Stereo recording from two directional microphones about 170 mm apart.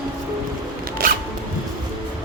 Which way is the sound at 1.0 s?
55° right (ahead or behind).